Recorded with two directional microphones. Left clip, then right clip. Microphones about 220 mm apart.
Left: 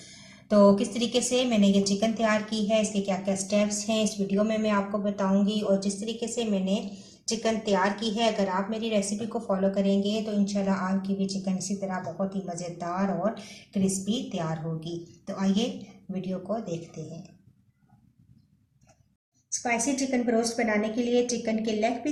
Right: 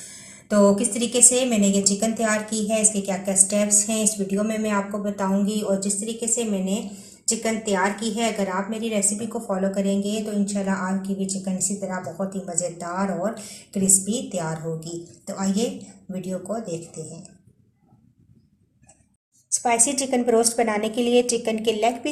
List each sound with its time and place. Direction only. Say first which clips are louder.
0.4 s a woman's voice: right 2 dB; centre (ahead or behind)
19.6 s a woman's voice: right 6 dB; 40° right (ahead or behind)